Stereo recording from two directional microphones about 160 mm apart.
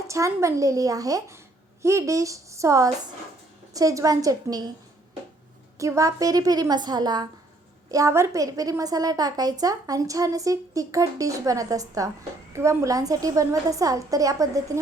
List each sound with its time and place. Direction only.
0.1 s a woman's voice: 20° right (ahead or behind)
5.7 s a woman's voice: 20° right (ahead or behind)